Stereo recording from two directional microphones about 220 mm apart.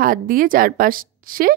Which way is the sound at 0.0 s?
40° right (ahead or behind).